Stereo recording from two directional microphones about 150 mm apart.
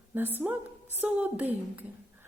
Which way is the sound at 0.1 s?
15° right (ahead or behind).